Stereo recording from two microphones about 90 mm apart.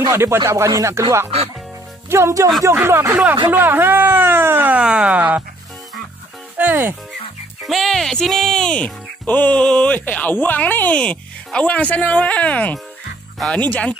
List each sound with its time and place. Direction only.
0.1 s speech: 30° right (ahead or behind)
2.0 s speech: 30° right (ahead or behind)
6.6 s speech: 20° right (ahead or behind)
7.6 s speech: centre (ahead or behind)